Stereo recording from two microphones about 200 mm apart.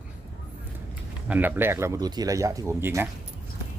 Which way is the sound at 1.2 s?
10° right (ahead or behind).